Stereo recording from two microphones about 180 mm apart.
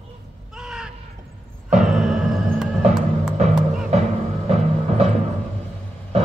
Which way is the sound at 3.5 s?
5° right (ahead or behind).